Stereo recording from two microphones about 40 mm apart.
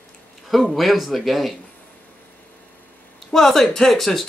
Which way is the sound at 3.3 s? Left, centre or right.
Centre.